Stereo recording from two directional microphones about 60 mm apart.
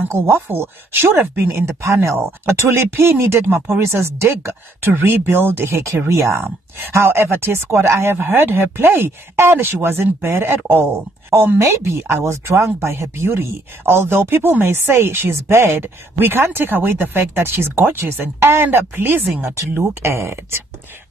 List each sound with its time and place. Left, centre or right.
0.3 s speech: right
1.7 s speech: right